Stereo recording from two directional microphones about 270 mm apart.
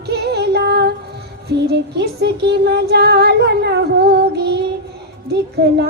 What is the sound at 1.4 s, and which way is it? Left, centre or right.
Music, right.